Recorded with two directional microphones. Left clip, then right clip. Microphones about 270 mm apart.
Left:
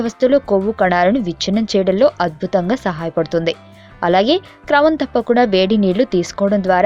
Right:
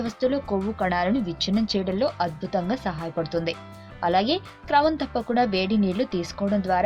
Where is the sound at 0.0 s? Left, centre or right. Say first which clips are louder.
Left 11 dB; left.